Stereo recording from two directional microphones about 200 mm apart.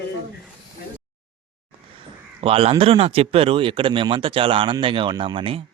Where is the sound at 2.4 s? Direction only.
30° right (ahead or behind).